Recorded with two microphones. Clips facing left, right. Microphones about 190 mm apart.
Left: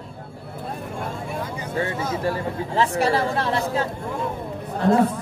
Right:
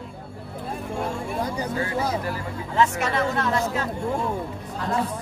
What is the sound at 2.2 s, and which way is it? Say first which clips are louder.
Speech: left 5 dB; 30° left (ahead or behind).